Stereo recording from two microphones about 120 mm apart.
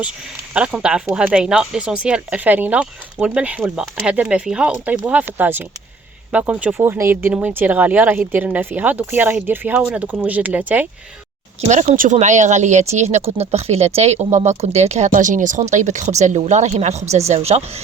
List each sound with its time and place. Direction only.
0.5 s a woman's voice: 10° right (ahead or behind)
6.8 s a woman's voice: 20° right (ahead or behind)
11.7 s speech: 85° right; by 17.8 s 60° right (ahead or behind)